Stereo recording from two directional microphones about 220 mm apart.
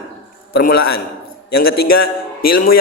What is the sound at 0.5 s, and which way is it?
A man's voice, 45° left (ahead or behind).